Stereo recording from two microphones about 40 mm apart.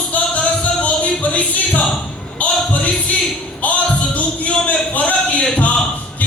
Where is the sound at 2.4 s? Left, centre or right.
Left.